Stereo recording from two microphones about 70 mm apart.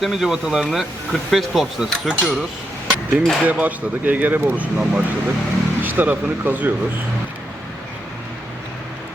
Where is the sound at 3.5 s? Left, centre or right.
Right.